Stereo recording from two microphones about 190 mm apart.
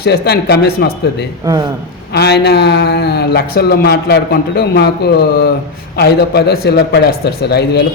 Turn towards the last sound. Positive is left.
turn(degrees=60)  # may be behind; listen again after turning